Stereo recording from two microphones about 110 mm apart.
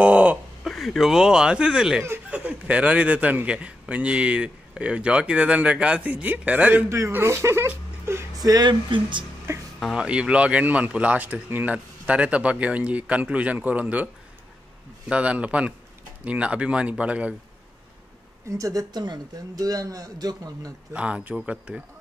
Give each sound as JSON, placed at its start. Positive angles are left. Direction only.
{"t": 0.0, "sound": "a sound", "side_deg": -10}
{"t": 0.7, "sound": "speech", "side_deg": 0}
{"t": 8.5, "sound": "speech", "side_deg": -40}
{"t": 9.5, "sound": "speech", "side_deg": -20}
{"t": 9.9, "sound": "speech", "side_deg": -10}
{"t": 15.0, "sound": "speech", "side_deg": -10}
{"t": 18.5, "sound": "speech", "side_deg": -30}
{"t": 20.9, "sound": "speech", "side_deg": -10}